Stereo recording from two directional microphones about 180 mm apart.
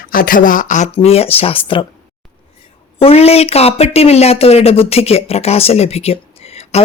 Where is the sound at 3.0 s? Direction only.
35° left (ahead or behind).